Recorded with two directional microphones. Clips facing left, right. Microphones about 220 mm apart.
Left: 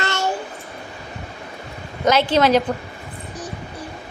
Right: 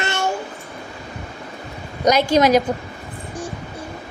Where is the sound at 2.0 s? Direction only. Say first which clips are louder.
Right 1 dB; 15° right (ahead or behind).